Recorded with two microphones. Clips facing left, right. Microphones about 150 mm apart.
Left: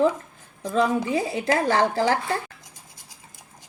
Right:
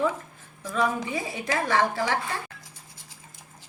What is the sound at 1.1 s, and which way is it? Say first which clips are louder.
Speech: left 6 dB; 35° left (ahead or behind).